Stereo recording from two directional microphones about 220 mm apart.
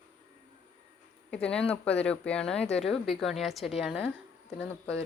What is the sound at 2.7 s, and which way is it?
Speech, 30° left (ahead or behind).